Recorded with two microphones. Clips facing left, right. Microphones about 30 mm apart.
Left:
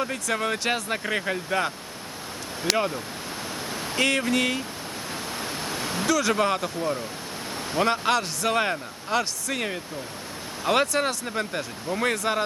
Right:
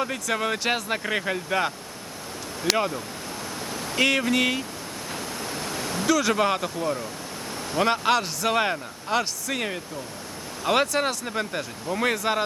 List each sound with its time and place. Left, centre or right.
0.0 s speech: centre
3.7 s a sound: left
3.9 s speech: centre
5.4 s waves: centre
6.1 s speech: centre